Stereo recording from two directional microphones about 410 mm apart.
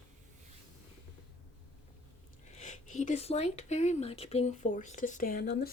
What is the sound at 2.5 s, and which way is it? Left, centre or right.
Speech, centre.